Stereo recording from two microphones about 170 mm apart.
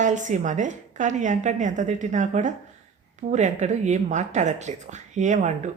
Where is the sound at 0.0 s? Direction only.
45° right (ahead or behind).